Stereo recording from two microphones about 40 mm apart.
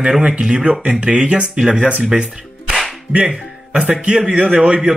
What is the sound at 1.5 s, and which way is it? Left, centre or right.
Speech, centre.